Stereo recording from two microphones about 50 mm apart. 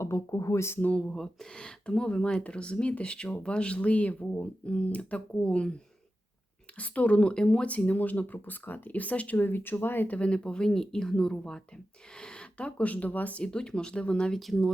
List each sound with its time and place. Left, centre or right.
0.0 s speech: left
1.1 s speech: centre
1.5 s speech: centre
6.7 s speech: left
7.2 s speech: centre
7.7 s speech: left
9.4 s speech: left
10.2 s speech: left
13.4 s speech: centre
14.3 s speech: centre